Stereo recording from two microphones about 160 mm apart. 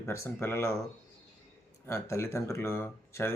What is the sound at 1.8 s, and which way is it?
Speech, 15° left (ahead or behind).